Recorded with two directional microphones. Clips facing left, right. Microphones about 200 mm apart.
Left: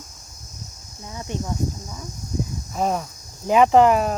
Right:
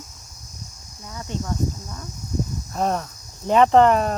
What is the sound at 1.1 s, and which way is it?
Speech, 20° left (ahead or behind).